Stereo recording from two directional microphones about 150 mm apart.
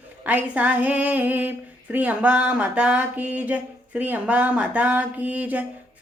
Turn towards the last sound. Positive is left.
turn(degrees=-10)  # may be behind; listen again after turning